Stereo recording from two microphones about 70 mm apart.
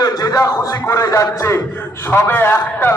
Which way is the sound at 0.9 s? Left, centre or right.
Left.